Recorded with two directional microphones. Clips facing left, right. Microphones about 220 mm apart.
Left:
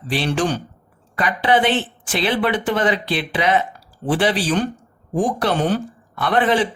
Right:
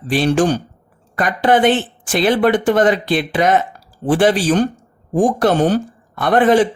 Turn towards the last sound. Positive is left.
turn(degrees=-45)  # may be behind; listen again after turning